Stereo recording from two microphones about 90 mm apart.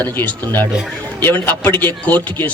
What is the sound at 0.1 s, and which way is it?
A man's voice, 25° left (ahead or behind).